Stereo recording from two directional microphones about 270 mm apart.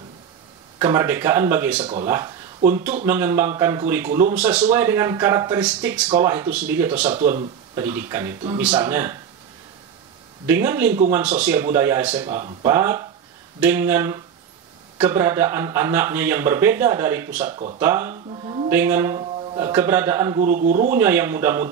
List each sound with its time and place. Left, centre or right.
0.7 s a man's voice: centre
10.4 s a man's voice: centre
18.1 s music: right
18.7 s a man's voice: centre
20.5 s speech: right
21.0 s a man's voice: centre